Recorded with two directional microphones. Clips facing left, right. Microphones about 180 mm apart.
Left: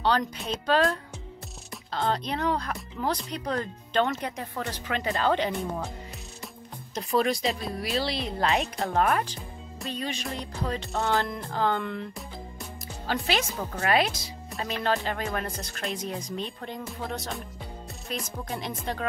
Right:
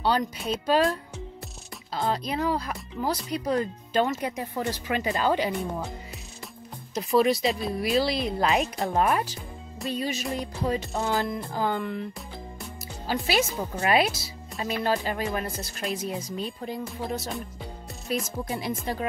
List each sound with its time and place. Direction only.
0.0 s speech: 10° right (ahead or behind)
6.9 s speech: centre (ahead or behind)
7.3 s speech: 40° left (ahead or behind)
8.8 s speech: 10° right (ahead or behind)
13.0 s speech: 10° right (ahead or behind)
18.5 s speech: 10° right (ahead or behind)